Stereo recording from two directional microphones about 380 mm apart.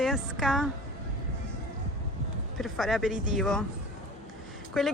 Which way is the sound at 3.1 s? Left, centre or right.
Centre.